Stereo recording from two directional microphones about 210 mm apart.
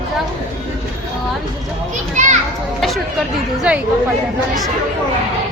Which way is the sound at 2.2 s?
35° right (ahead or behind).